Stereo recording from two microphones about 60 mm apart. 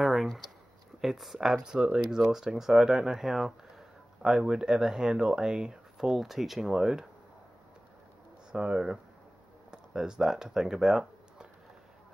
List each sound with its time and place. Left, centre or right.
0.0 s a sound: centre
1.0 s speech: centre
8.5 s speech: centre